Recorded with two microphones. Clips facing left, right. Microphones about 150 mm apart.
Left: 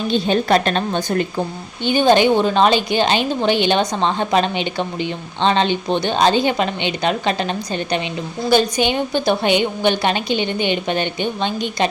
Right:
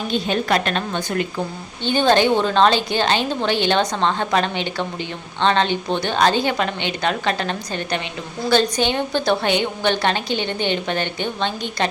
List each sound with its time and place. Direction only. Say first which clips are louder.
0.1 s a woman's voice: left 4 dB; 30° left (ahead or behind)
1.8 s a woman's voice: left 3 dB; 15° left (ahead or behind)